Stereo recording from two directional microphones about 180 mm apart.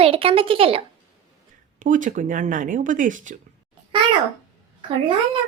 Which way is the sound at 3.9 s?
25° right (ahead or behind).